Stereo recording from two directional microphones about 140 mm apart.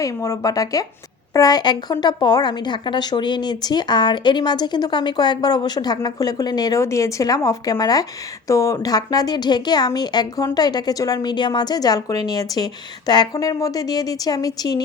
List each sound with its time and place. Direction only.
0.0 s speech: 25° left (ahead or behind)